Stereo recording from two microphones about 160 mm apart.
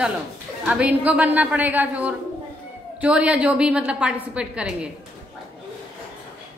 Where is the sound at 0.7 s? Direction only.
10° right (ahead or behind).